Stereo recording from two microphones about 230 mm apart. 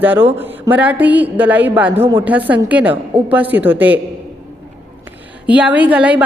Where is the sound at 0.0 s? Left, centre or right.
Centre.